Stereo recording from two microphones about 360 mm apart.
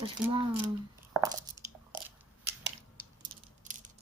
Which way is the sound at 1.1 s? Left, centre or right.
Centre.